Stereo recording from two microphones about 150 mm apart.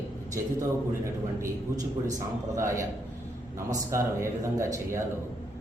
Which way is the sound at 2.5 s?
20° right (ahead or behind).